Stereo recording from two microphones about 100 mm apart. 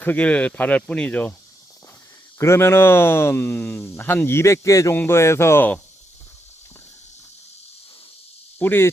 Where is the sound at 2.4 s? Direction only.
25° left (ahead or behind).